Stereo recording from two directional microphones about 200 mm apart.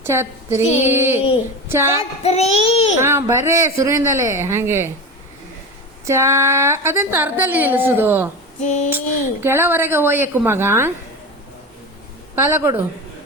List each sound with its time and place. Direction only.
0.0 s a woman's voice: 10° right (ahead or behind)
2.2 s child singing: 30° left (ahead or behind)
3.0 s a woman's voice: 15° right (ahead or behind)
6.1 s a woman's voice: 15° right (ahead or behind)
8.6 s child singing: 35° left (ahead or behind)
9.4 s a woman's voice: 10° right (ahead or behind)
12.4 s a woman's voice: 15° right (ahead or behind)